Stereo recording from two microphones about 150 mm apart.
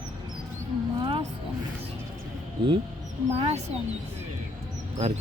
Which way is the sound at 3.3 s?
45° right (ahead or behind).